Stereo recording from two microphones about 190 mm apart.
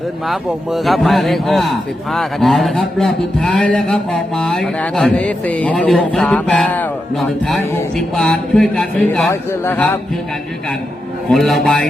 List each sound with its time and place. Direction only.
0.3 s a man's voice: centre (ahead or behind)
11.3 s a man's voice: centre (ahead or behind)